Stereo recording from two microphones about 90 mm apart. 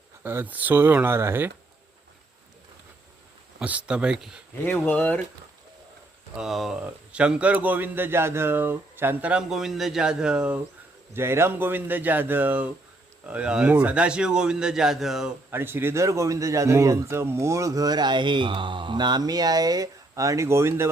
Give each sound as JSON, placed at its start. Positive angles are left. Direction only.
{"t": 0.2, "sound": "speech", "side_deg": -20}
{"t": 3.6, "sound": "speech", "side_deg": -10}
{"t": 4.6, "sound": "speech", "side_deg": 15}
{"t": 6.3, "sound": "speech", "side_deg": -5}
{"t": 9.3, "sound": "speech", "side_deg": -5}
{"t": 11.1, "sound": "speech", "side_deg": -25}
{"t": 15.4, "sound": "speech", "side_deg": -25}